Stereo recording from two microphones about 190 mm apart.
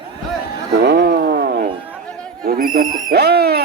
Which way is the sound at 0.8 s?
65° right (ahead or behind).